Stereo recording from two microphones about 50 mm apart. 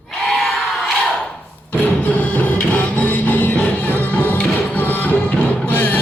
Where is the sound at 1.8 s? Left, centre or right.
Left.